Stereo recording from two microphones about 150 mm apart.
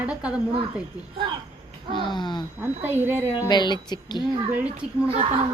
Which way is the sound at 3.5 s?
30° left (ahead or behind).